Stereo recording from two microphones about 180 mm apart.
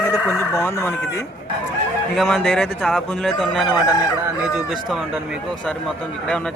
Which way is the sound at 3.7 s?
25° left (ahead or behind).